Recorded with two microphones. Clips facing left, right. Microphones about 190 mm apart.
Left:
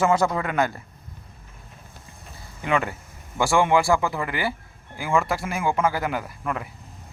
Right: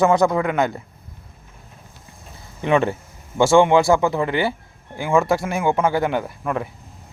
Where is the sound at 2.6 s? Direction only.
25° right (ahead or behind).